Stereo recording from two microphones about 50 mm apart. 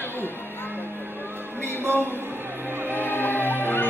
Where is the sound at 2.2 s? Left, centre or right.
Right.